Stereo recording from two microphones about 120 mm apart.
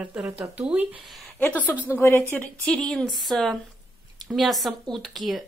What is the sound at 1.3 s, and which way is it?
A woman's voice, 10° left (ahead or behind).